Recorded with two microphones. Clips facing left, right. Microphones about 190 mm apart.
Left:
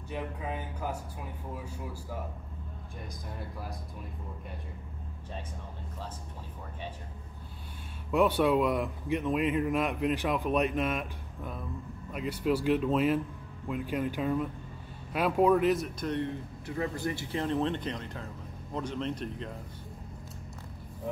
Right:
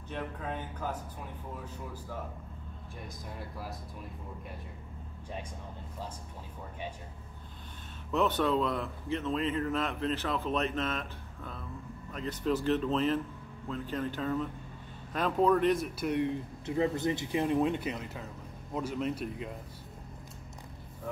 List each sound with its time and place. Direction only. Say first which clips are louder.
0.1 s speech: left 1 dB; 10° left (ahead or behind)
3.3 s speech: even; centre (ahead or behind)
8.1 s speech: left 3 dB; 10° left (ahead or behind); by 19.5 s 5° right (ahead or behind)